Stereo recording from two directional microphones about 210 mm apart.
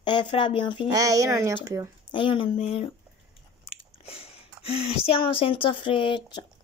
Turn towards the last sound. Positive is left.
turn(degrees=20)  # may be behind; listen again after turning